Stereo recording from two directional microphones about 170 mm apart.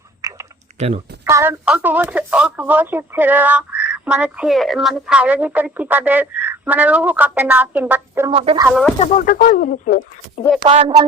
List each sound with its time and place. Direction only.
0.2 s typing: 20° right (ahead or behind)
0.8 s speech: 35° right (ahead or behind)
1.2 s a woman's voice: 15° right (ahead or behind)
8.3 s speech: 30° right (ahead or behind)
9.0 s speech: 40° left (ahead or behind)
10.7 s speech: 35° right (ahead or behind)